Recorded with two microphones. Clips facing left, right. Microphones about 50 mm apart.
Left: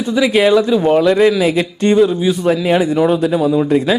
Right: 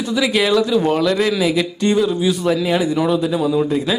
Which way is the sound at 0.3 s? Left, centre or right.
Left.